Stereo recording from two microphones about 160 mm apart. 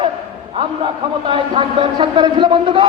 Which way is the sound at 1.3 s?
30° right (ahead or behind).